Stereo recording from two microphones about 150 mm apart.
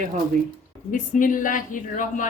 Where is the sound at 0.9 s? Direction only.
60° left (ahead or behind).